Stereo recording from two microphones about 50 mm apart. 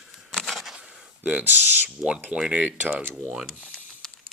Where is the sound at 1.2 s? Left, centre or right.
Right.